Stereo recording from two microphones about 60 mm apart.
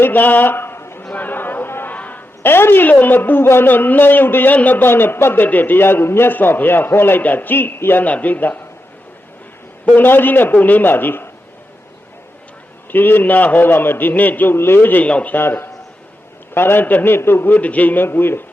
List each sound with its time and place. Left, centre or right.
0.0 s a sound: left
1.9 s a man's voice: left
9.8 s a man's voice: left
12.9 s a man's voice: left
15.4 s a man's voice: left